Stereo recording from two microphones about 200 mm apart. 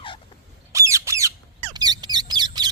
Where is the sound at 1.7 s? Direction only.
20° right (ahead or behind).